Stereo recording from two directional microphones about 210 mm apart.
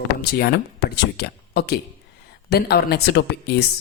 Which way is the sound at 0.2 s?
50° left (ahead or behind).